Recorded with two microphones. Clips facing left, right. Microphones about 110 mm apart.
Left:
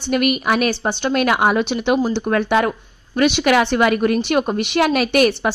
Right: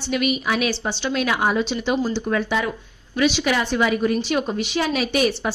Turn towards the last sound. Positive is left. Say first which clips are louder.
# left 5 dB
turn(degrees=60)  # may be behind; listen again after turning